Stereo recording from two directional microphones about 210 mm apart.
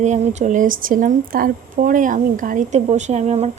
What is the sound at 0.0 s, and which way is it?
Speech, 35° right (ahead or behind).